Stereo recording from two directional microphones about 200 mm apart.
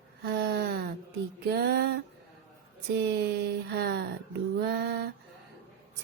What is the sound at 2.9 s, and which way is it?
Speech, 55° right (ahead or behind).